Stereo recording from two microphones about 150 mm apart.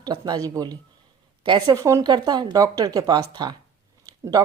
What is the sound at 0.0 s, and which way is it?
Speech, 25° right (ahead or behind).